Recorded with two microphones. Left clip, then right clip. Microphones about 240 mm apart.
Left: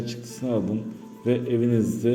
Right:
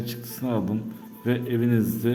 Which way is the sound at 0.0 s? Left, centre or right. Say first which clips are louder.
Left 1 dB; centre.